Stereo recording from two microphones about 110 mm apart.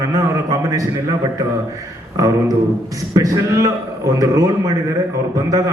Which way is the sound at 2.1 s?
30° right (ahead or behind).